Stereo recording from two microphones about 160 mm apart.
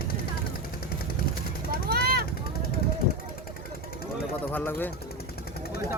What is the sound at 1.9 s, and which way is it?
Vehicle, 75° right (ahead or behind).